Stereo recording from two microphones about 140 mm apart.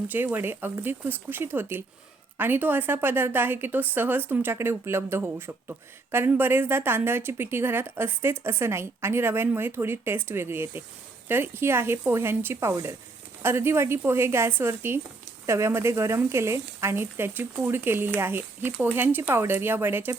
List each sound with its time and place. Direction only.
0.1 s a woman's voice: 15° right (ahead or behind)